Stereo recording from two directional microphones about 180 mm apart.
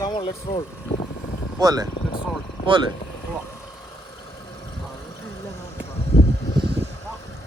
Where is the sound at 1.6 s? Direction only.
20° right (ahead or behind).